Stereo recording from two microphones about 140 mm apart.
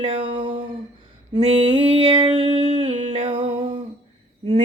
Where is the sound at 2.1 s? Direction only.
40° right (ahead or behind).